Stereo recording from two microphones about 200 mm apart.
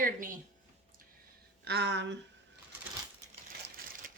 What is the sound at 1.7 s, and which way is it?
Speech, 55° right (ahead or behind).